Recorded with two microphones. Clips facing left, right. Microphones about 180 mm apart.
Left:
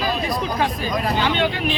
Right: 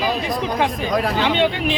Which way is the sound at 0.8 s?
70° right (ahead or behind).